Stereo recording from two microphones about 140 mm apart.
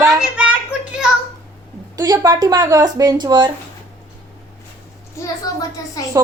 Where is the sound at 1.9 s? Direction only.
25° right (ahead or behind).